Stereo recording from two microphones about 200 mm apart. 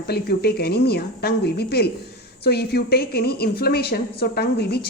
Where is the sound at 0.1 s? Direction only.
50° left (ahead or behind).